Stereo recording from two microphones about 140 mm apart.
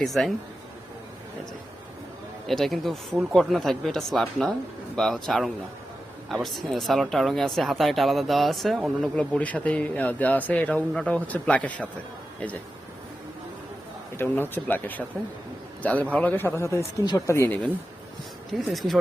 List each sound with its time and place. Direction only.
0.0 s speech: centre (ahead or behind)
2.5 s speech: centre (ahead or behind)
14.2 s a man's voice: 15° left (ahead or behind)
18.5 s speech: centre (ahead or behind)